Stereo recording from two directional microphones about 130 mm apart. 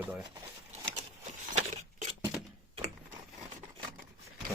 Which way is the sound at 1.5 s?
65° right (ahead or behind).